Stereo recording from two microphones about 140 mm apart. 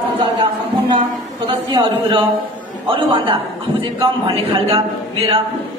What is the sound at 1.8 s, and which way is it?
A woman's voice, 40° right (ahead or behind).